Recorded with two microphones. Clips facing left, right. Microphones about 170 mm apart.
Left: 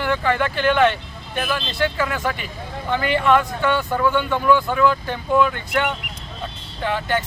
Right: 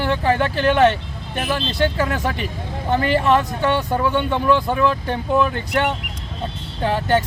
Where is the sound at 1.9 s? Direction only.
35° right (ahead or behind).